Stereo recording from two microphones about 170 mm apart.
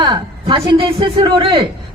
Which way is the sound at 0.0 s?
30° right (ahead or behind).